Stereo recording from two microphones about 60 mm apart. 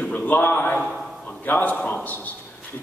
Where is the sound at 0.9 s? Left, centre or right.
Centre.